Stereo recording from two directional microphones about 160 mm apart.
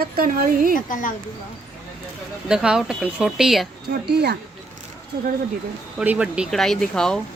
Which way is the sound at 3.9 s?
85° right.